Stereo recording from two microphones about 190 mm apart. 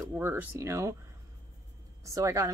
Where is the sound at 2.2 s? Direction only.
15° right (ahead or behind).